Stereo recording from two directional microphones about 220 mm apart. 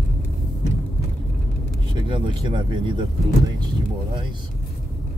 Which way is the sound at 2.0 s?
20° right (ahead or behind).